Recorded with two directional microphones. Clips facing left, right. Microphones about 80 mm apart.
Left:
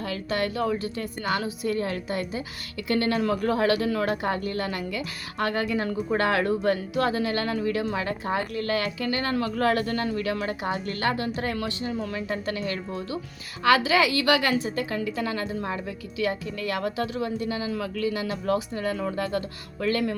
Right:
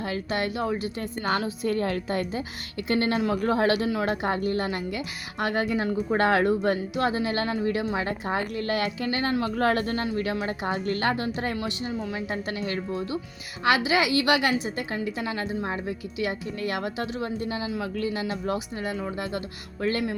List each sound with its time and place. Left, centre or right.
0.0 s a woman's voice: right
1.2 s a woman's voice: right
13.7 s a woman's voice: right